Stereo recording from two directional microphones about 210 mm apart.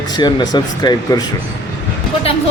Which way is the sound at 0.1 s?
20° left (ahead or behind).